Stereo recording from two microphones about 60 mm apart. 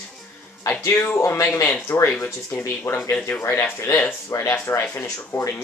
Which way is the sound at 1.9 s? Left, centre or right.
Left.